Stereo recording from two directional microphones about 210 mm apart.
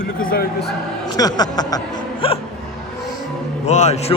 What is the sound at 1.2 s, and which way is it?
Speech, 20° left (ahead or behind).